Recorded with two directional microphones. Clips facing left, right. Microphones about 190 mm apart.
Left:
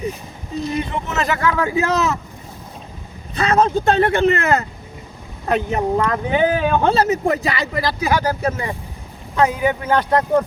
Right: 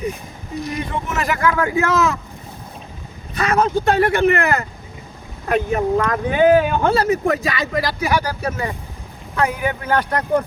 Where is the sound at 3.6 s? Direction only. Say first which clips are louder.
Even; 25° left (ahead or behind).